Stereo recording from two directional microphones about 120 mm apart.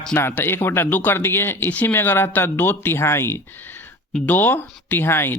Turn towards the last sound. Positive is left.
turn(degrees=20)  # may be behind; listen again after turning